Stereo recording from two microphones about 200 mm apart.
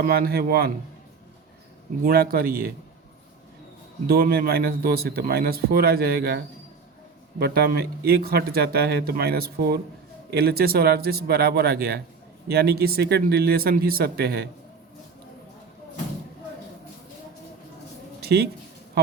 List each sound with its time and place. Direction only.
0.0 s speech: 50° right (ahead or behind)
2.0 s speech: 50° right (ahead or behind)
4.0 s speech: 50° right (ahead or behind)
18.2 s a sound: 55° right (ahead or behind)